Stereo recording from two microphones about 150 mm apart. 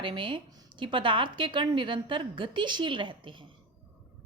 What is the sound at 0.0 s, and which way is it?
A woman's voice, 35° right (ahead or behind).